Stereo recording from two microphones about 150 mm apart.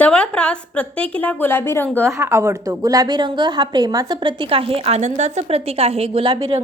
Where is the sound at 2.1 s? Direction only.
20° right (ahead or behind).